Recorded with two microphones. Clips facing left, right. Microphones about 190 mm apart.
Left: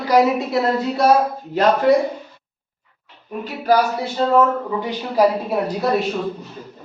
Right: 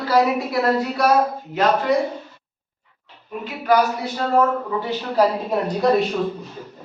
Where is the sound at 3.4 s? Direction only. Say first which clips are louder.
Left 1 dB; 35° left (ahead or behind).